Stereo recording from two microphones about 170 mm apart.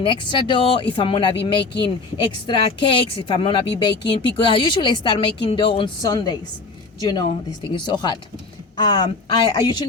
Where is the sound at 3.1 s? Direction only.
35° left (ahead or behind).